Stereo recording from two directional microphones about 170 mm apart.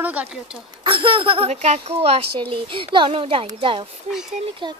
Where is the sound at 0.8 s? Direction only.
30° right (ahead or behind).